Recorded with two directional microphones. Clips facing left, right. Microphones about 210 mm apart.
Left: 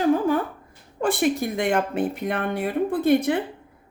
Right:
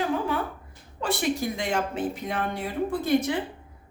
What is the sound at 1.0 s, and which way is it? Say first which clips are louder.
A woman's voice: left 4 dB; 55° left (ahead or behind).